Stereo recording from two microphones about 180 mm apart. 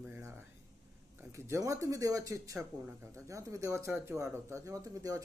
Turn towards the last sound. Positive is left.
turn(degrees=-20)  # may be behind; listen again after turning